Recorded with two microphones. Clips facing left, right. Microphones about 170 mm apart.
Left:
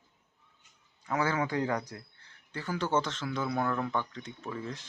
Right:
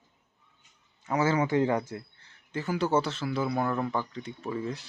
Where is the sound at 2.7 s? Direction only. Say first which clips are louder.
Right 3 dB; 10° right (ahead or behind).